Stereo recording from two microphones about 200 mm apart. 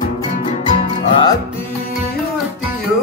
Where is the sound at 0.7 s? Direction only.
25° left (ahead or behind).